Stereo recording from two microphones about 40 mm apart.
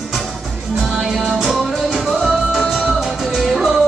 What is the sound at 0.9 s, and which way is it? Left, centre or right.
Music, centre.